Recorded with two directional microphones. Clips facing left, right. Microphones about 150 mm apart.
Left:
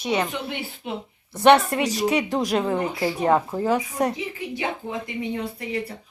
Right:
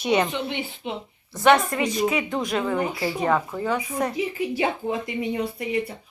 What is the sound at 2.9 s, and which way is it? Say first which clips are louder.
Speech: left 2 dB; 20° left (ahead or behind).